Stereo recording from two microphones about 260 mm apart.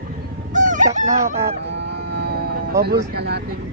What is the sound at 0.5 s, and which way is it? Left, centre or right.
Fowl, right.